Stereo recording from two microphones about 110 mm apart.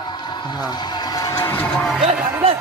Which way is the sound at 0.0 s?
45° left (ahead or behind).